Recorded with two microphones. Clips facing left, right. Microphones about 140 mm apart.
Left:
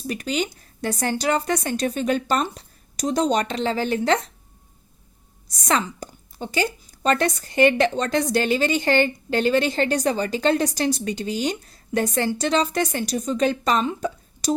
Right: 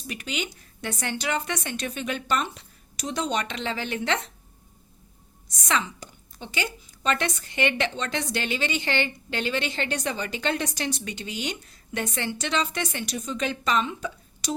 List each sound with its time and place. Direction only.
0.1 s a woman's voice: 40° left (ahead or behind)
5.5 s a woman's voice: 40° left (ahead or behind)